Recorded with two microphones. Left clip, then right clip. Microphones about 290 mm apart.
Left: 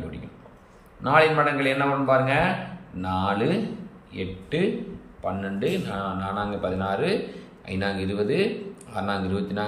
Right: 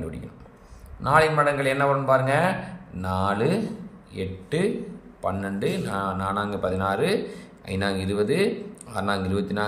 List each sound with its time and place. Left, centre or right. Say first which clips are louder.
1.0 s a man's voice: even; right